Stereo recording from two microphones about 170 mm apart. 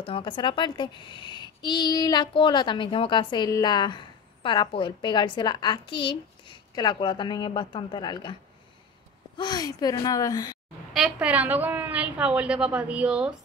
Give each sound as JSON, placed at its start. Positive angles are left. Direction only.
{"t": 0.0, "sound": "a child's voice", "side_deg": 30}
{"t": 9.4, "sound": "a child's voice", "side_deg": 25}
{"t": 10.9, "sound": "a woman's voice", "side_deg": -5}